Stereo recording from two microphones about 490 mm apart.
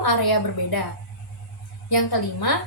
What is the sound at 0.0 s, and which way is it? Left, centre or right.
Speech, left.